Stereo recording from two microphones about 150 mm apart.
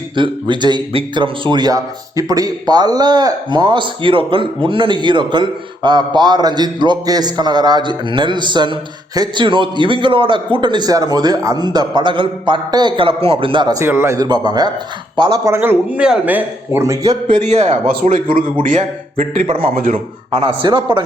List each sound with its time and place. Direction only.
0.2 s speech: 30° right (ahead or behind)
13.8 s a man's voice: 15° right (ahead or behind)
17.3 s a man's voice: 50° right (ahead or behind)
17.8 s speech: 65° right (ahead or behind)
19.5 s speech: 35° right (ahead or behind)
19.7 s speech: 65° right (ahead or behind)
20.6 s speech: 30° right (ahead or behind)